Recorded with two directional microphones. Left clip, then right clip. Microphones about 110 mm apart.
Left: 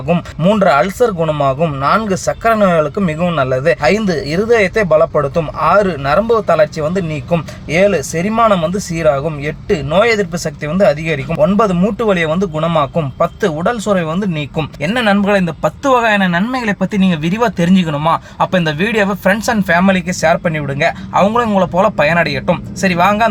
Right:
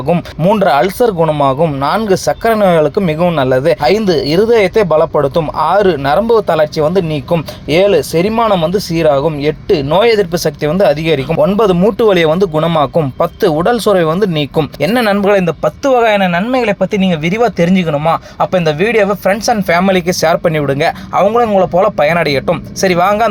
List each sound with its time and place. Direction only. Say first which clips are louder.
0.1 s speech: right 2 dB; 20° right (ahead or behind)
7.3 s speech: right 3 dB; 35° right (ahead or behind); by 19.6 s 10° right (ahead or behind)
19.6 s speech: right 1 dB; 25° right (ahead or behind); by 21.2 s 40° right (ahead or behind)
21.2 s speech: right 4 dB; 15° right (ahead or behind); by 23.3 s 30° right (ahead or behind)